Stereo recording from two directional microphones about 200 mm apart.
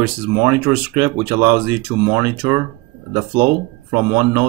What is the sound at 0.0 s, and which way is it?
Speech, 15° right (ahead or behind).